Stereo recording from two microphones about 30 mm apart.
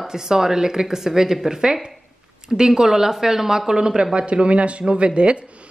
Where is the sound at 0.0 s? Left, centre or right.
Centre.